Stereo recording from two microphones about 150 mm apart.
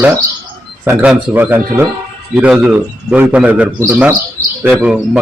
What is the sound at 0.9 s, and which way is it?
A man's voice, 10° right (ahead or behind).